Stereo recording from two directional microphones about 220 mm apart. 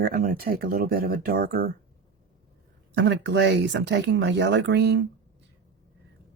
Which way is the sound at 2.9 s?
50° right (ahead or behind).